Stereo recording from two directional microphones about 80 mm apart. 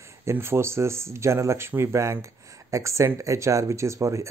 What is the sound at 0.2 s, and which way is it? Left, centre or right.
Speech, right.